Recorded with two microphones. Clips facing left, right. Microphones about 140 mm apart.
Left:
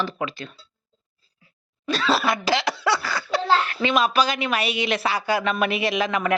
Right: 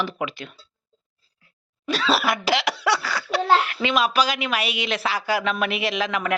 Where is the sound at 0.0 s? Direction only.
15° right (ahead or behind).